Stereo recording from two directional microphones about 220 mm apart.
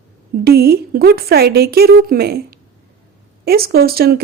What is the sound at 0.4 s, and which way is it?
A woman's voice, 45° right (ahead or behind).